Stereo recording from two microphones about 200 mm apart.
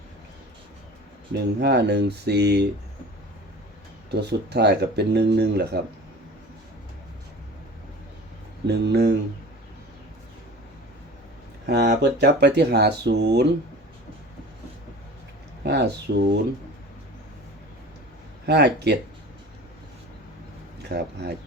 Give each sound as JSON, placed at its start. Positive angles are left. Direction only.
{"t": 1.3, "sound": "speech", "side_deg": -55}
{"t": 4.1, "sound": "speech", "side_deg": -55}
{"t": 8.6, "sound": "speech", "side_deg": -55}
{"t": 11.6, "sound": "speech", "side_deg": -55}
{"t": 15.6, "sound": "speech", "side_deg": -60}
{"t": 18.4, "sound": "speech", "side_deg": -55}
{"t": 20.9, "sound": "speech", "side_deg": -55}